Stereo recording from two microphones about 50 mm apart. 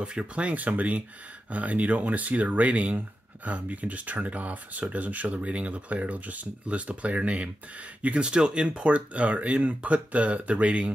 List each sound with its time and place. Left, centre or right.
0.0 s speech: centre